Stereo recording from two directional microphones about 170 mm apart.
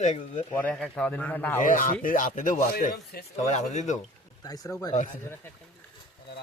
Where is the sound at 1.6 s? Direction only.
50° left (ahead or behind).